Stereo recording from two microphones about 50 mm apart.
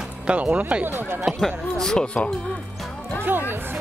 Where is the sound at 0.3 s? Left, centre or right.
Right.